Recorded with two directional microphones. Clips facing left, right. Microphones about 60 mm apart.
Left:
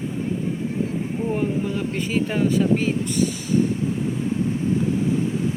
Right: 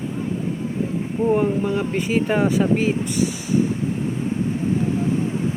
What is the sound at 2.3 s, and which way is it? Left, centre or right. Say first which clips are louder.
Speech: right 1 dB; right.